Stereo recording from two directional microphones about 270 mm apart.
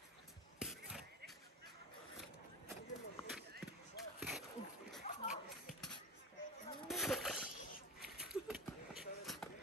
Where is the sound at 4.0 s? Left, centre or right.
Centre.